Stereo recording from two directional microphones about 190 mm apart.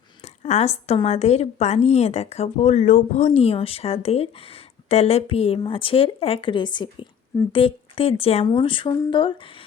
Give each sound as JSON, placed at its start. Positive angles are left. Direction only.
{"t": 0.4, "sound": "a woman's voice", "side_deg": 35}